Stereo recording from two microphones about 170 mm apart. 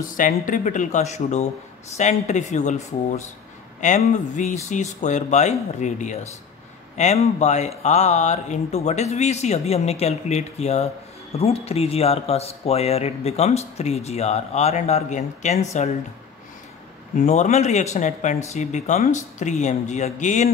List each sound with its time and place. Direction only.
0.0 s speech: 50° left (ahead or behind)
17.1 s speech: 45° left (ahead or behind)